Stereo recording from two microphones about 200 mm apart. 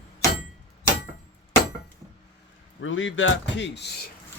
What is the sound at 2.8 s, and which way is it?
Speech, 75° left (ahead or behind).